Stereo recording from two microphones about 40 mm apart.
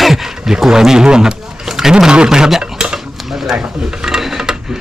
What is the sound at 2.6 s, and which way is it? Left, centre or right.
Dishes, right.